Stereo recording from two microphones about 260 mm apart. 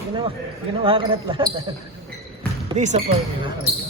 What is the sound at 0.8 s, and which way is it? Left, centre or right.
Speech, centre.